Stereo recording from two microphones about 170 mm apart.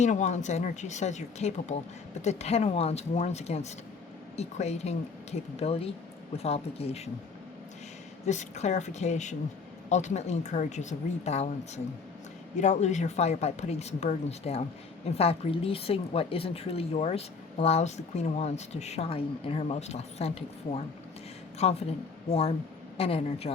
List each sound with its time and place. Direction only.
0.0 s a woman's voice: 45° left (ahead or behind)
8.3 s speech: 45° left (ahead or behind)
12.5 s a woman's voice: 45° left (ahead or behind)